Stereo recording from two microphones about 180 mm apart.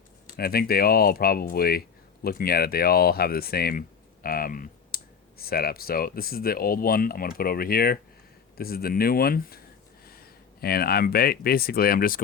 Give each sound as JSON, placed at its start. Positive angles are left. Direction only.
{"t": 0.3, "sound": "speech", "side_deg": 60}